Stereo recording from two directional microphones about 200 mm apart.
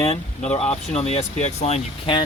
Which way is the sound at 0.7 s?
30° left (ahead or behind).